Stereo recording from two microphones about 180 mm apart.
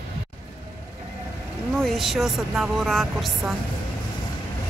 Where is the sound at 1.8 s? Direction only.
Centre (ahead or behind).